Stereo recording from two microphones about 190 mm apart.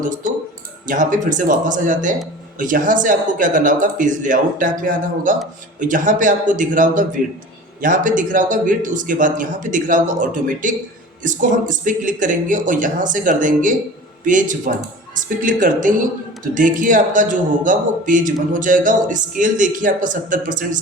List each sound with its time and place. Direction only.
0.0 s a man's voice: 45° right (ahead or behind)